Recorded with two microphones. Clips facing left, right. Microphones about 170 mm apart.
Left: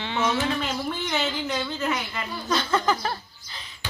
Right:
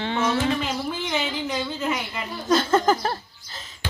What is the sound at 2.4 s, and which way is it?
Speech, 45° right (ahead or behind).